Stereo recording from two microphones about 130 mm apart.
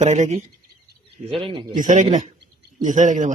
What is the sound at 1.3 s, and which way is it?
Speech, 45° right (ahead or behind).